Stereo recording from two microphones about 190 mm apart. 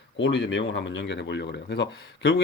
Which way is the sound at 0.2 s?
70° left (ahead or behind).